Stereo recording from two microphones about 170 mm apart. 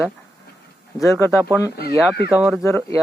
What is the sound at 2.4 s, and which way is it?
Speech, 5° right (ahead or behind).